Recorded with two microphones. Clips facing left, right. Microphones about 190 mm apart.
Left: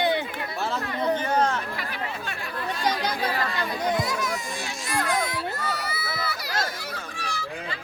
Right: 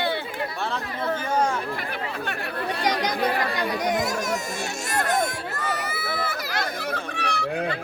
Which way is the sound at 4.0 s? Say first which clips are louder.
Right 2 dB; 45° right (ahead or behind).